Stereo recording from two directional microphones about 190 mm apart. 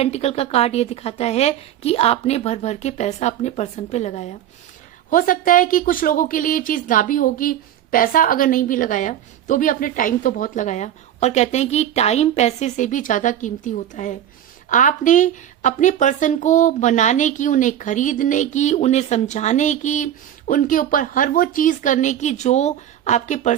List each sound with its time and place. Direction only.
0.0 s a woman's voice: 35° left (ahead or behind)